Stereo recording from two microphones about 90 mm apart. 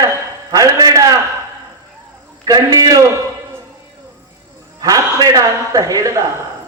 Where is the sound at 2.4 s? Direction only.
45° right (ahead or behind).